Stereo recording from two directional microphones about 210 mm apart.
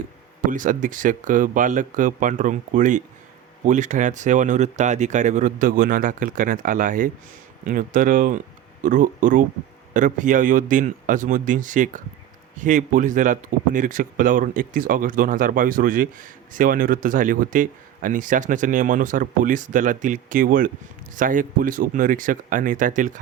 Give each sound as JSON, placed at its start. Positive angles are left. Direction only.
{"t": 0.5, "sound": "a man's voice", "side_deg": -40}